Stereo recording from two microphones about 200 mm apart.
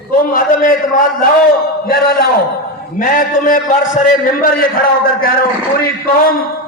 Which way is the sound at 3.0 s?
45° left (ahead or behind).